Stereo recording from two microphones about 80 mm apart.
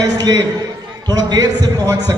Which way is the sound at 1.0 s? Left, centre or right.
Right.